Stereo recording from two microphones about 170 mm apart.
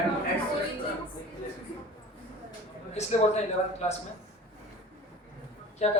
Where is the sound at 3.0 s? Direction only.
40° left (ahead or behind).